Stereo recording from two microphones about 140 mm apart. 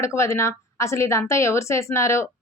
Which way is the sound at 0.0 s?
20° left (ahead or behind).